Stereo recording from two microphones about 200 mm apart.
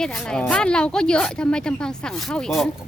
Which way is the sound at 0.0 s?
5° left (ahead or behind).